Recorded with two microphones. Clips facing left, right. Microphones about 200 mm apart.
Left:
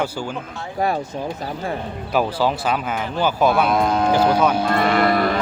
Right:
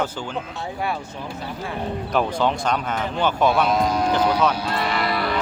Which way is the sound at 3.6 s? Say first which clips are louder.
Left 2 dB; 55° left (ahead or behind).